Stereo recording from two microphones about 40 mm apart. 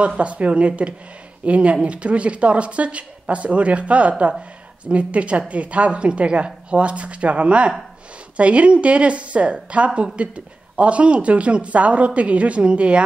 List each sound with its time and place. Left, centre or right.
0.2 s speech: right